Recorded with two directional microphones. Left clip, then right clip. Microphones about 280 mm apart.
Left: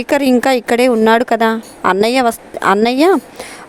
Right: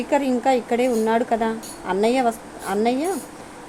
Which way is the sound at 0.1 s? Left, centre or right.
Left.